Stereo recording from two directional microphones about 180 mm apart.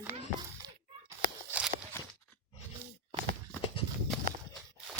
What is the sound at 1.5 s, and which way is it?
Walk, 10° right (ahead or behind).